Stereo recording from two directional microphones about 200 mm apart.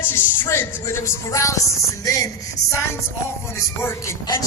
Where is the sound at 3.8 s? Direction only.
15° left (ahead or behind).